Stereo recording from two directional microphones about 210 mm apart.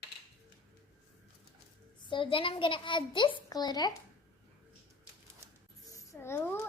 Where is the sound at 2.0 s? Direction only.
25° left (ahead or behind).